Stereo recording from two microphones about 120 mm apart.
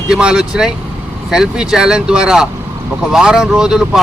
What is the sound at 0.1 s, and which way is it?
Speech, 5° right (ahead or behind).